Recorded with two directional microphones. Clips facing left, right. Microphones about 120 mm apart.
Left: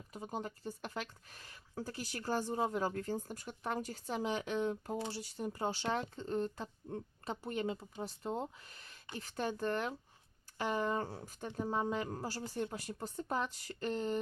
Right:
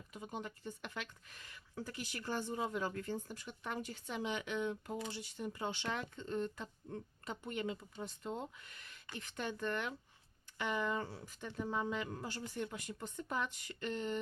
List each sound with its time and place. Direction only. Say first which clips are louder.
0.1 s speech: left 3 dB; 35° left (ahead or behind)